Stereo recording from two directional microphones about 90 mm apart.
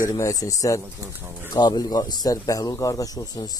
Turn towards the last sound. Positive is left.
turn(degrees=45)  # may be behind; listen again after turning